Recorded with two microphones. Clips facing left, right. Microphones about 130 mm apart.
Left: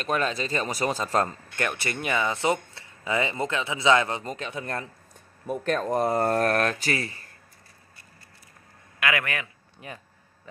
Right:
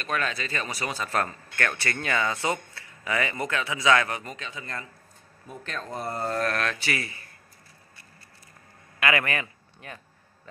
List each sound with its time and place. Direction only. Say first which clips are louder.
0.0 s speech: left 3 dB; 40° left (ahead or behind)
1.6 s speech: even; 15° left (ahead or behind)
4.3 s speech: left 5 dB; 50° left (ahead or behind)
4.6 s a man's voice: left 6 dB; 65° left (ahead or behind)
6.3 s speech: left 4 dB; 45° left (ahead or behind)
9.0 s a man's voice: right 2 dB; centre (ahead or behind)